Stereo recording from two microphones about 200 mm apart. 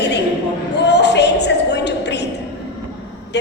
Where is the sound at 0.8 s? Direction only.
60° left (ahead or behind).